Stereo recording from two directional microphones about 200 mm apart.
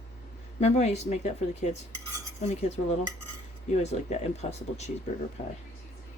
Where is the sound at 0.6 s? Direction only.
35° left (ahead or behind).